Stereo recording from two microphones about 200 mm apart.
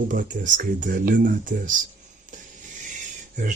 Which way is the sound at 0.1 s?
40° right (ahead or behind).